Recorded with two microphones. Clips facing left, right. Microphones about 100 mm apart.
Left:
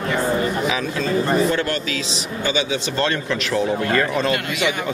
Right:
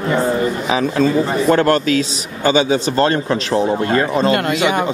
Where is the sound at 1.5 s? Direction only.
45° right (ahead or behind); by 4.7 s 30° right (ahead or behind).